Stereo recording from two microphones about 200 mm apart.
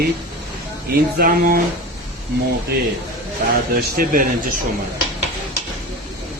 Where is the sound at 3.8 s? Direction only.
45° right (ahead or behind).